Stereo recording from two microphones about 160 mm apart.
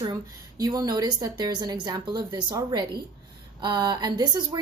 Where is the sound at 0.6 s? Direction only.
25° right (ahead or behind).